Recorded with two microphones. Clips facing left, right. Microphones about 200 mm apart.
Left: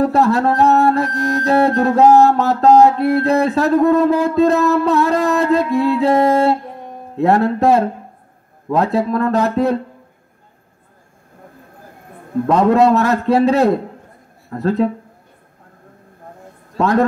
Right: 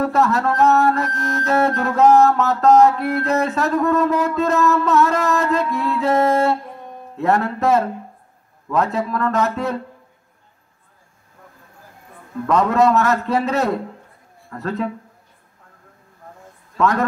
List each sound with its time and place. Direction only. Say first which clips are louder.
0.0 s music: left 4 dB; 30° left (ahead or behind)
12.4 s music: left 4 dB; 30° left (ahead or behind)
16.7 s a woman's voice: left 3 dB; 30° left (ahead or behind)